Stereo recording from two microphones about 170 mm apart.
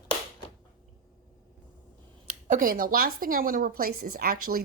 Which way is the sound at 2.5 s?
55° right (ahead or behind).